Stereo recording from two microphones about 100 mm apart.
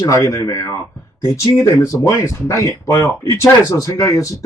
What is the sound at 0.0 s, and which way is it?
Speech, 30° left (ahead or behind).